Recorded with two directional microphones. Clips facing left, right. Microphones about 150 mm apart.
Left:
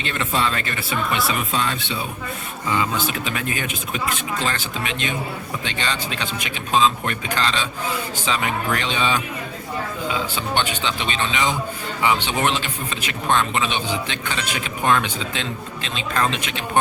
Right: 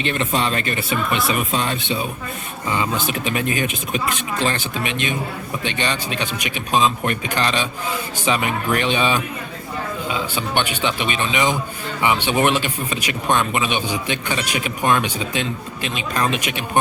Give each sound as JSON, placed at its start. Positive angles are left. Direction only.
{"t": 0.2, "sound": "speech", "side_deg": -20}